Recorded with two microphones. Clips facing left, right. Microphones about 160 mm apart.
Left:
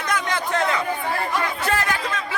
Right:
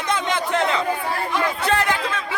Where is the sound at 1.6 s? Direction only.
20° right (ahead or behind).